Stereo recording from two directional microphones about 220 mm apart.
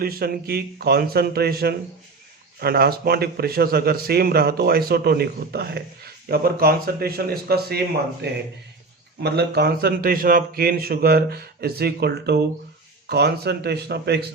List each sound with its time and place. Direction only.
0.0 s a man's voice: 45° right (ahead or behind)